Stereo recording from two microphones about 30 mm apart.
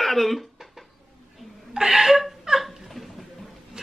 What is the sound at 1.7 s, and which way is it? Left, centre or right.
Laughter, centre.